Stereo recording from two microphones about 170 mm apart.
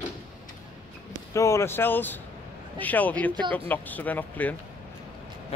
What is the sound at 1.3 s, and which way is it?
Speech, 15° left (ahead or behind).